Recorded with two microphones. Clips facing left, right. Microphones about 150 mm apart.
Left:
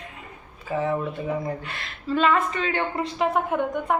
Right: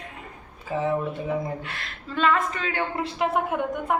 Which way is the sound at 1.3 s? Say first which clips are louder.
Even; centre (ahead or behind).